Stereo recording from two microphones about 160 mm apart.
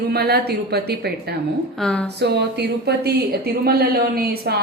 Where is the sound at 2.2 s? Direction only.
90° right.